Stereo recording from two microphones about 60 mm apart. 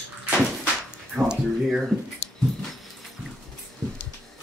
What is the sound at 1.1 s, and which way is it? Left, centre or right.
Speech, centre.